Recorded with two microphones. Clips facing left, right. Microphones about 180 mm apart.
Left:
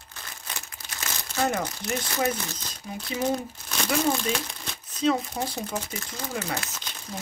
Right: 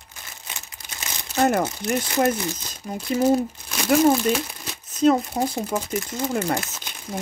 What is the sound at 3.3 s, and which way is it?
Crumpling, 5° right (ahead or behind).